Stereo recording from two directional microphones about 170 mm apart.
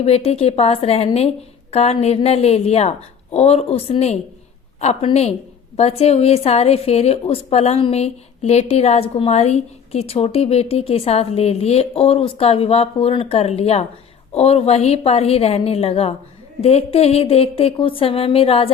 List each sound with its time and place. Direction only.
0.0 s a woman's voice: 35° left (ahead or behind)